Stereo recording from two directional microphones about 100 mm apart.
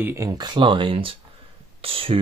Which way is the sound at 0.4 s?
50° right (ahead or behind).